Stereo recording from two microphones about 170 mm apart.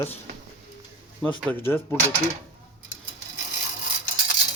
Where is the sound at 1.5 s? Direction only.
15° left (ahead or behind).